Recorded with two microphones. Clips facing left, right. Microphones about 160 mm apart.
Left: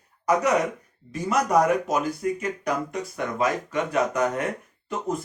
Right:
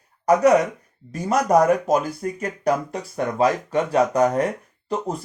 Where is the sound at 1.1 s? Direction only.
40° right (ahead or behind).